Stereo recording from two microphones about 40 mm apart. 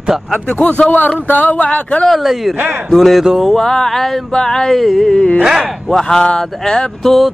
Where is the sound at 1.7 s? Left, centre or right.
Left.